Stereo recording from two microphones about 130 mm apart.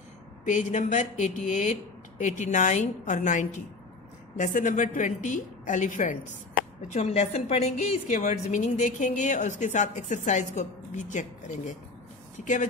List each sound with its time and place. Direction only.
0.5 s a woman's voice: 70° left (ahead or behind)
4.4 s a woman's voice: 80° left
6.9 s a woman's voice: 60° left (ahead or behind)
8.1 s a woman's voice: 70° left (ahead or behind)